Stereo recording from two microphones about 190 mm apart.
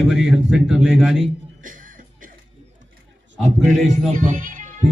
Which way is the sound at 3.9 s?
40° right (ahead or behind).